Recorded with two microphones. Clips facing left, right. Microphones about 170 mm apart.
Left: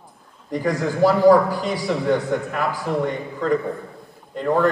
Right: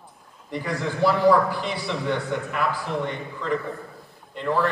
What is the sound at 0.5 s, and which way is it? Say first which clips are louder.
A man's voice: left 6 dB; 40° left (ahead or behind).